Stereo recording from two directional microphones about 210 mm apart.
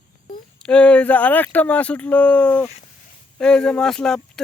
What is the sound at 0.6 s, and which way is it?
Speech, 5° left (ahead or behind).